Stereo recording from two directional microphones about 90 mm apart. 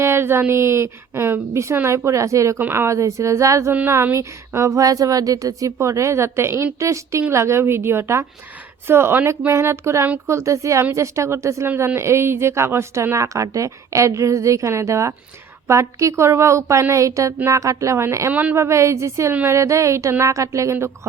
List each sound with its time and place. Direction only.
0.0 s a woman's voice: 30° right (ahead or behind)
3.7 s a woman's voice: 25° right (ahead or behind)
18.3 s speech: 20° right (ahead or behind)
18.5 s a woman's voice: 30° right (ahead or behind)